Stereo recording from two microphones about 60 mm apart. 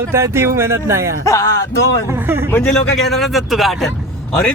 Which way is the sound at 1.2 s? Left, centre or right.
Left.